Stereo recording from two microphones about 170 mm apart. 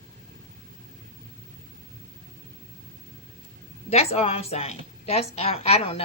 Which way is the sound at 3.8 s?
35° left (ahead or behind).